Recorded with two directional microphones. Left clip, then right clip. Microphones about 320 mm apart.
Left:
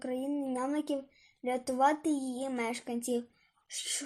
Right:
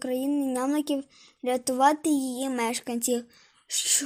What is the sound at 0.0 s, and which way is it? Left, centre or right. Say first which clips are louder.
Speech: right 7 dB; right.